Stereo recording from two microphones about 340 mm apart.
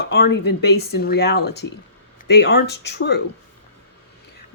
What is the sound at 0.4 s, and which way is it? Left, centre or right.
Speech, left.